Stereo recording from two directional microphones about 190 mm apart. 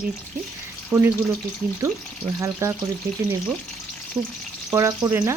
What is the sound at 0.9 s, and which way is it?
Speech, 10° right (ahead or behind).